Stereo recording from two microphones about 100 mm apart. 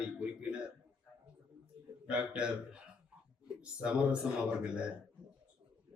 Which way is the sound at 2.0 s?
10° right (ahead or behind).